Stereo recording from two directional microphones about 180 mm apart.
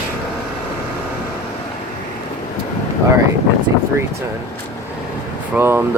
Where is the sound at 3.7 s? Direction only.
15° right (ahead or behind).